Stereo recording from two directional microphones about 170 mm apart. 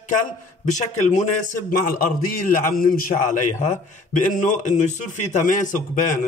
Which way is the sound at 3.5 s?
45° left (ahead or behind).